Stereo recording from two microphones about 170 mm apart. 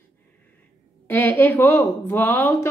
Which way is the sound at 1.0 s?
10° left (ahead or behind).